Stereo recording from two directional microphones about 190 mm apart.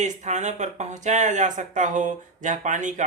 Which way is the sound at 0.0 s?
40° right (ahead or behind).